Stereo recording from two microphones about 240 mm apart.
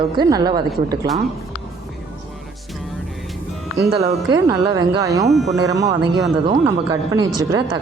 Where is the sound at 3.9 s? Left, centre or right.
Centre.